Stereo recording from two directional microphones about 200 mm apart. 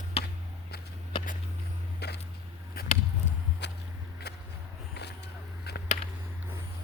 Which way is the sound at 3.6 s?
60° left (ahead or behind).